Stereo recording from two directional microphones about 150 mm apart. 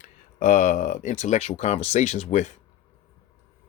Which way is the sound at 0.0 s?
55° left (ahead or behind).